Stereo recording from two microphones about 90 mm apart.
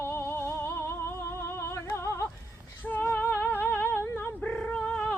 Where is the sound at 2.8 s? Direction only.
20° left (ahead or behind).